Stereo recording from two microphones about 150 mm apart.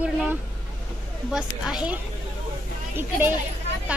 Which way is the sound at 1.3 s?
5° right (ahead or behind).